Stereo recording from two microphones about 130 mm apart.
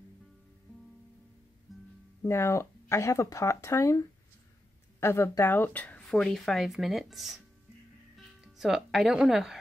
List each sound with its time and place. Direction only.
2.2 s speech: 20° left (ahead or behind)
5.0 s speech: 20° left (ahead or behind); by 7.4 s centre (ahead or behind)
8.5 s speech: 5° right (ahead or behind)